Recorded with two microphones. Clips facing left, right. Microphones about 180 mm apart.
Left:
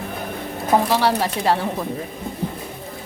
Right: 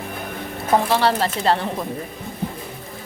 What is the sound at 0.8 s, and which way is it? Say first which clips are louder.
Speech: even; 10° left (ahead or behind).